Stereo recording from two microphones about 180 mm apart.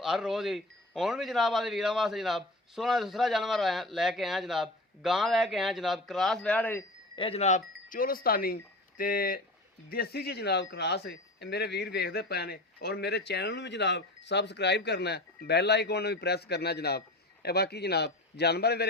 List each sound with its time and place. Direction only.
0.0 s speech: centre (ahead or behind)
7.2 s a man's voice: 35° left (ahead or behind); by 18.9 s 65° left (ahead or behind)